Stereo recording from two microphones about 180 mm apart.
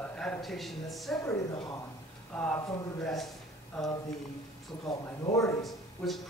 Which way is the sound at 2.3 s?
5° left (ahead or behind).